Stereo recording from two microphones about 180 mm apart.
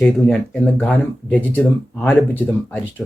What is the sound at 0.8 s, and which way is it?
Speech, 10° left (ahead or behind).